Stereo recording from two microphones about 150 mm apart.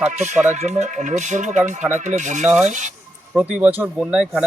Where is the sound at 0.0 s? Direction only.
50° right (ahead or behind).